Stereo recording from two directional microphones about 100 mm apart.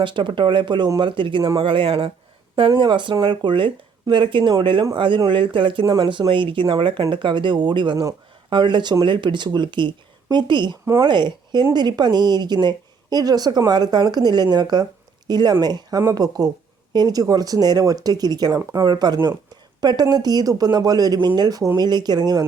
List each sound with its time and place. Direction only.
0.0 s a woman's voice: 55° right (ahead or behind)
5.8 s speech: 35° right (ahead or behind)
6.1 s a woman's voice: 55° right (ahead or behind)